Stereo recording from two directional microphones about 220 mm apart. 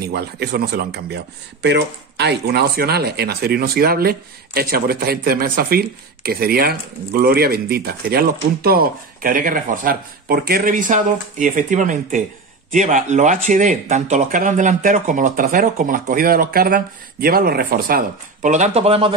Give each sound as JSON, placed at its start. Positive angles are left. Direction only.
{"t": 0.0, "sound": "speech", "side_deg": -45}